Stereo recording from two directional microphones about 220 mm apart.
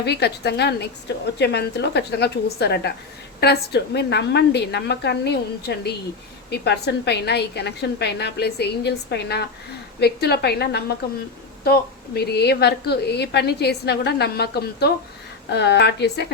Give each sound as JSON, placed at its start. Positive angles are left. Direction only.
{"t": 0.0, "sound": "a woman's voice", "side_deg": 50}